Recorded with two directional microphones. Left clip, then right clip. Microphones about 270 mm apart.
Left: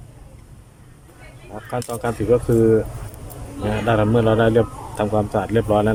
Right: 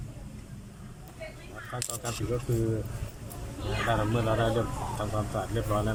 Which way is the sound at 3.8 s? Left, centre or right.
Left.